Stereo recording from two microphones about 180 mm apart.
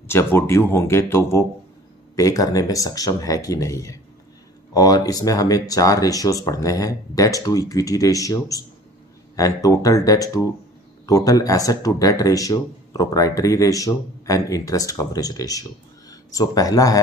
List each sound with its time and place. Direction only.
0.1 s speech: 15° left (ahead or behind)